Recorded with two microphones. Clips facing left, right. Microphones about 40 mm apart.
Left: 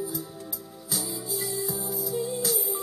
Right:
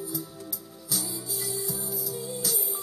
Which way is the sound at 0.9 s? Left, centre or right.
Centre.